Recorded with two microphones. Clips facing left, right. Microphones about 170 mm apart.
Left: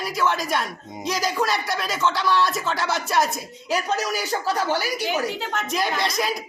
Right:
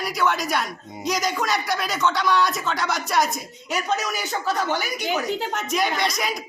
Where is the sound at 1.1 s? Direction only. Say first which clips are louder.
Right 1 dB; 30° left (ahead or behind).